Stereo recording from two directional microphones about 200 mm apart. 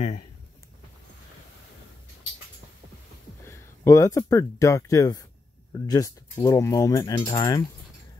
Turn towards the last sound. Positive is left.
turn(degrees=20)  # may be behind; listen again after turning